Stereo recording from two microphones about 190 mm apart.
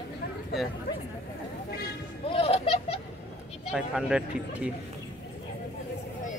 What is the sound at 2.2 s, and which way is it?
Music, 30° left (ahead or behind).